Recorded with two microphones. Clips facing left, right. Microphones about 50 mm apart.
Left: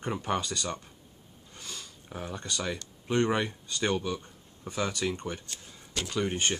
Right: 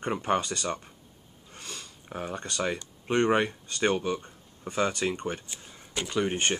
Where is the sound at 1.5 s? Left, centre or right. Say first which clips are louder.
Right 1 dB; right.